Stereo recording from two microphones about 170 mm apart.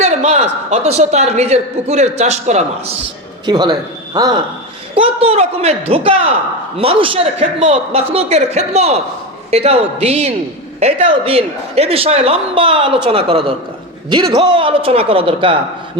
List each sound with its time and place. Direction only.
0.0 s a man's voice: 40° right (ahead or behind)
3.4 s speech: 25° right (ahead or behind)
4.9 s a man's voice: 35° right (ahead or behind)